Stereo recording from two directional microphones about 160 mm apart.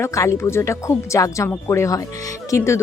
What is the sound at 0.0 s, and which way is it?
A woman's voice, 20° left (ahead or behind).